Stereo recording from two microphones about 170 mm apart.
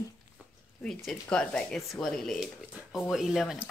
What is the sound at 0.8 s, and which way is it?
Speech, 5° left (ahead or behind).